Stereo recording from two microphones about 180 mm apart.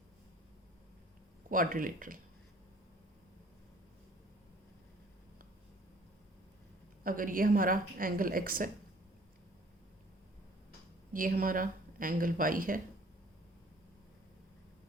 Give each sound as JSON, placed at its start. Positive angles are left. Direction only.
{"t": 1.5, "sound": "a woman's voice", "side_deg": -50}
{"t": 7.0, "sound": "a woman's voice", "side_deg": -50}
{"t": 11.1, "sound": "a woman's voice", "side_deg": -50}